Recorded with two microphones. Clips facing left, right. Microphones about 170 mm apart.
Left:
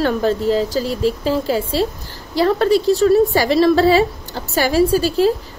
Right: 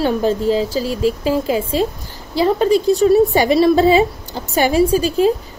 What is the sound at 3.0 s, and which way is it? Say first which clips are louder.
Child singing: right 1 dB; 15° right (ahead or behind).